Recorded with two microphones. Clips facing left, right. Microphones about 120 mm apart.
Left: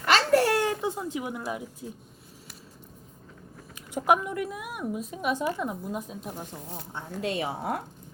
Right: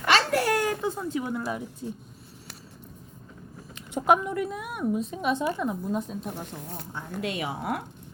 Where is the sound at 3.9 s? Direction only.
5° left (ahead or behind).